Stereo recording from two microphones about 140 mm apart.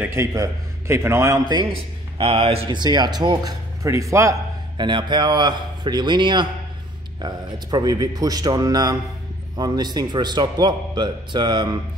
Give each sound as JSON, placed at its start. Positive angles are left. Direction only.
{"t": 0.0, "sound": "a man's voice", "side_deg": -20}
{"t": 1.4, "sound": "a man's voice", "side_deg": -30}
{"t": 4.7, "sound": "a man's voice", "side_deg": -35}